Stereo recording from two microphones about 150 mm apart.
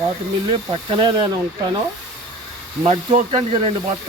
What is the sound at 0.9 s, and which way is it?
Speech, 35° right (ahead or behind).